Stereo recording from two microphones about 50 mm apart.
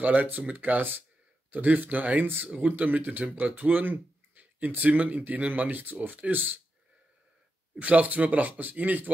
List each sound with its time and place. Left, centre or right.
0.0 s speech: right
7.8 s speech: right